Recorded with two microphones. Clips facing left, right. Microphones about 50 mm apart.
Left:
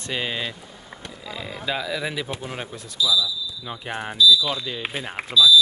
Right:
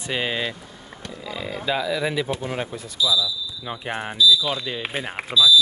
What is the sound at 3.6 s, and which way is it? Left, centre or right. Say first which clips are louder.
Speech: right 3 dB; centre.